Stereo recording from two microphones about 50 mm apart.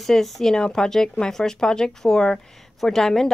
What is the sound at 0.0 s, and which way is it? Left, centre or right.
A woman's voice, centre.